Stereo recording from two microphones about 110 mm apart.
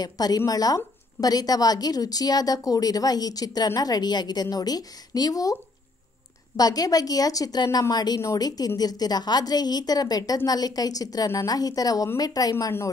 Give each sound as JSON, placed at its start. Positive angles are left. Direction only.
{"t": 0.0, "sound": "a woman's voice", "side_deg": 35}